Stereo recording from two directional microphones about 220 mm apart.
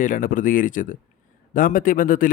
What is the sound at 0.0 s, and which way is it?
A man's voice, 40° left (ahead or behind).